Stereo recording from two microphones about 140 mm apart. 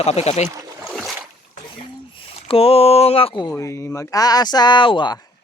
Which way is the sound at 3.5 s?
20° left (ahead or behind).